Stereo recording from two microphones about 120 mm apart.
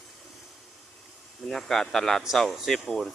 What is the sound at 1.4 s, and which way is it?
Speech, centre (ahead or behind).